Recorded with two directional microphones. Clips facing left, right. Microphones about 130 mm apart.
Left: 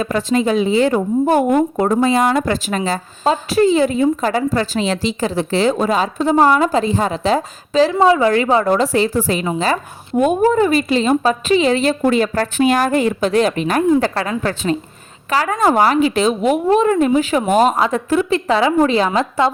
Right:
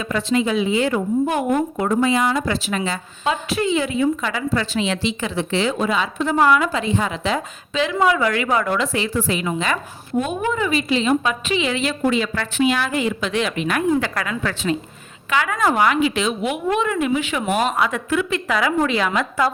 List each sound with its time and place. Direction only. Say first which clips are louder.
0.0 s a woman's voice: left 4 dB; 40° left (ahead or behind)
10.2 s a woman's voice: left 8 dB; 45° left (ahead or behind)